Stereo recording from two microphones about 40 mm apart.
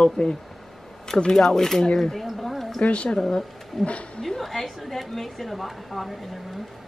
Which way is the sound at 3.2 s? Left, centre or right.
Centre.